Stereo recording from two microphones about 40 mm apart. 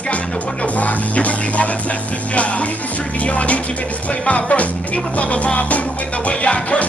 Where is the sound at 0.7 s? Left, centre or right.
Left.